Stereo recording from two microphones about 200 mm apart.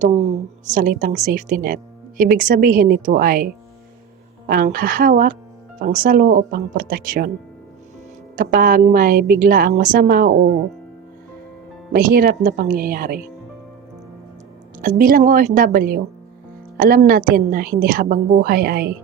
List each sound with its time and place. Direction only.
0.7 s a woman's voice: 40° right (ahead or behind)
8.4 s a woman's voice: 45° right (ahead or behind)
11.9 s a woman's voice: 45° right (ahead or behind)
14.8 s a woman's voice: 45° right (ahead or behind)